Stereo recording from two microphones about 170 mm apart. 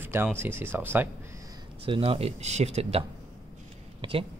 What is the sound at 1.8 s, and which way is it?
Speech, 30° right (ahead or behind).